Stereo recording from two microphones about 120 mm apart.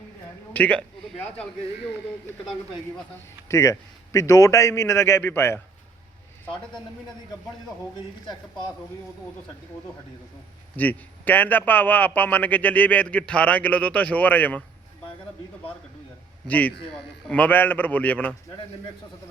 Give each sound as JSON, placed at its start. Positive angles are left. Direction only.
{"t": 0.5, "sound": "a man's voice", "side_deg": 10}
{"t": 3.5, "sound": "a man's voice", "side_deg": 25}
{"t": 10.8, "sound": "a man's voice", "side_deg": 15}
{"t": 16.5, "sound": "a man's voice", "side_deg": 15}